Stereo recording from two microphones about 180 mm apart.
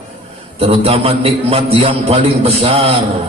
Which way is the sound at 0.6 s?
35° right (ahead or behind).